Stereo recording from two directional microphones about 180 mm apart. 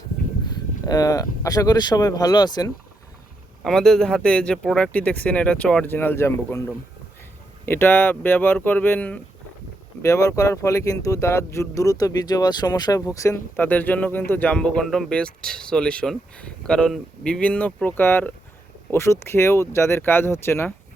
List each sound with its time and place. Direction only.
0.4 s speech: 20° left (ahead or behind)
3.6 s speech: centre (ahead or behind)
7.6 s speech: 10° left (ahead or behind)